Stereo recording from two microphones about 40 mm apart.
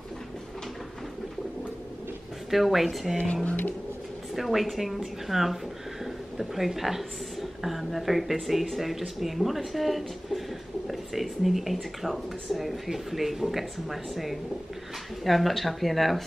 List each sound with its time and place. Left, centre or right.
2.5 s speech: centre
3.4 s speech: left
4.4 s speech: centre